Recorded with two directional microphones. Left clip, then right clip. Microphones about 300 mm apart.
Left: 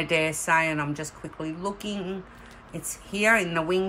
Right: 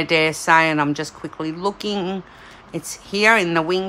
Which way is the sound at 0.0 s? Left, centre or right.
Centre.